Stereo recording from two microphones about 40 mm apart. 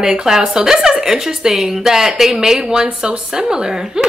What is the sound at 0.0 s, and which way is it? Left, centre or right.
A woman's voice, centre.